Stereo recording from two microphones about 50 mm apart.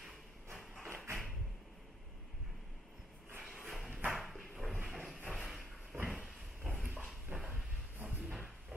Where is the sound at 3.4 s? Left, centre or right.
Centre.